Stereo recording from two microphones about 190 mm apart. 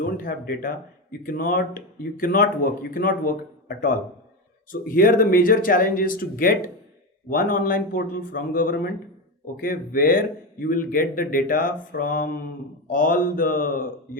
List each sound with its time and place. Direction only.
0.2 s speech: 45° left (ahead or behind)
4.7 s speech: 45° left (ahead or behind)